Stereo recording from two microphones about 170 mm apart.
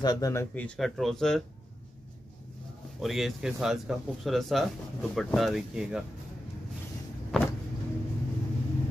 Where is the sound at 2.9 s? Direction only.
Centre (ahead or behind).